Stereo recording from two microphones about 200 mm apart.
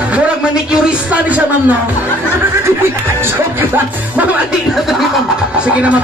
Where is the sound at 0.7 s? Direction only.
5° right (ahead or behind).